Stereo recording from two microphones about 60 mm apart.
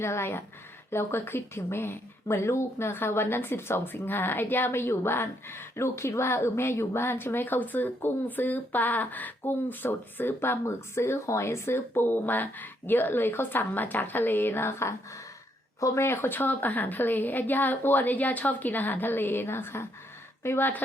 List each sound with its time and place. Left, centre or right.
0.0 s speech: left
16.0 s speech: left